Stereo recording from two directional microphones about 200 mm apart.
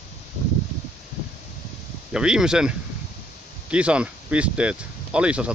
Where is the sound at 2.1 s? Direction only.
5° right (ahead or behind).